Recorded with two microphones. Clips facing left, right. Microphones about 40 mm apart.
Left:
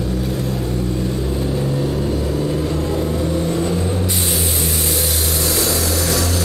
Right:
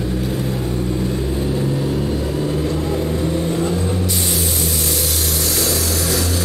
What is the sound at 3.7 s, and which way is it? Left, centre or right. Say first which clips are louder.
Vehicle: even; centre.